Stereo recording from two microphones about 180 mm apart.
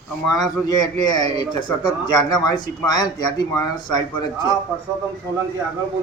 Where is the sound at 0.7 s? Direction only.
20° left (ahead or behind).